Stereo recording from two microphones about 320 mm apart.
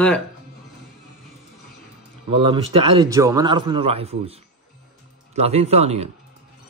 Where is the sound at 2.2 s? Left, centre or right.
Centre.